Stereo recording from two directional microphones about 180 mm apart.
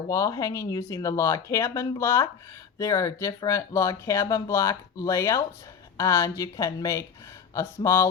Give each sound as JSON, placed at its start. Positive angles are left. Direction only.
{"t": 0.1, "sound": "speech", "side_deg": 20}